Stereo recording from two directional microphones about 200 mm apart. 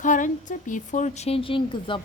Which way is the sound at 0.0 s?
40° left (ahead or behind).